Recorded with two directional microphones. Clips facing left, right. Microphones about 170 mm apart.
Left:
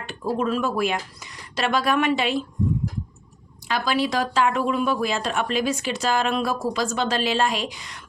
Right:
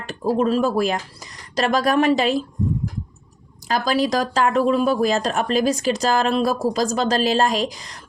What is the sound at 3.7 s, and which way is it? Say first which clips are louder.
Speech: right 3 dB; 40° right (ahead or behind).